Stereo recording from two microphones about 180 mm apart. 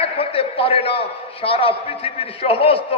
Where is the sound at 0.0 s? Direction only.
30° left (ahead or behind).